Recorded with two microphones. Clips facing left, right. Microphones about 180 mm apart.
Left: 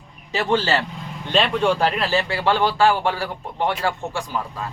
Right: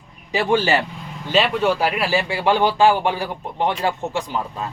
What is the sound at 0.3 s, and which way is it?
Speech, 15° right (ahead or behind).